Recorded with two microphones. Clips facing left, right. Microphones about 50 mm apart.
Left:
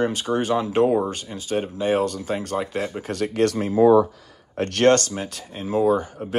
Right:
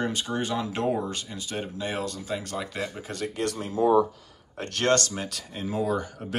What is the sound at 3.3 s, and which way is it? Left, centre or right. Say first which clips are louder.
Speech: left 10 dB; left.